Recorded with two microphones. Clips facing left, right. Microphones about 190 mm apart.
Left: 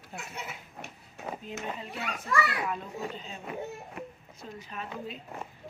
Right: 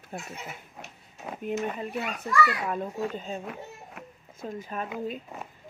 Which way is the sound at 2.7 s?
45° right (ahead or behind).